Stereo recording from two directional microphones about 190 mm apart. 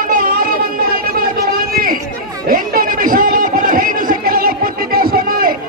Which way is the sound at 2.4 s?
45° right (ahead or behind).